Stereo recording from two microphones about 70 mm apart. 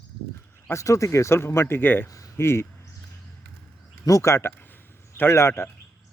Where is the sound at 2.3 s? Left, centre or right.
Left.